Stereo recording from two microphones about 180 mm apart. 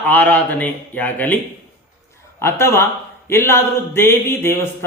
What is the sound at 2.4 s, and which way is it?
A man's voice, 15° left (ahead or behind).